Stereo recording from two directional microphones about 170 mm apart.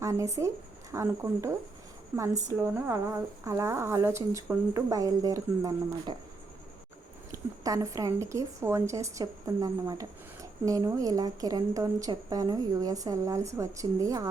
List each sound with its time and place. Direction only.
0.0 s speech: 20° right (ahead or behind)
7.3 s a woman's voice: 20° right (ahead or behind)